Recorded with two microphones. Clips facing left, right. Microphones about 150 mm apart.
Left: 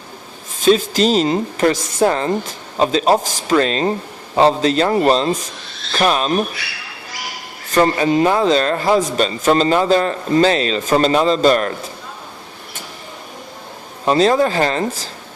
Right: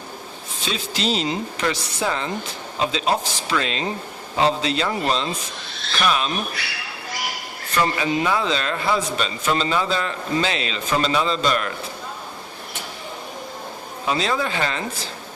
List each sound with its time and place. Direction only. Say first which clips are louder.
0.6 s a man's voice: left 12 dB; 45° left (ahead or behind)
7.7 s a man's voice: left 7 dB; 40° left (ahead or behind)
14.0 s a man's voice: left 9 dB; 40° left (ahead or behind)